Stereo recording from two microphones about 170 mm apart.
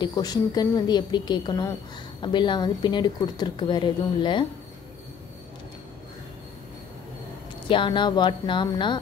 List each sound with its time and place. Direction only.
0.0 s speech: 20° left (ahead or behind)
7.6 s speech: 30° left (ahead or behind)